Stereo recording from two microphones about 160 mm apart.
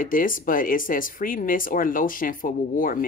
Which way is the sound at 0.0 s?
60° left (ahead or behind).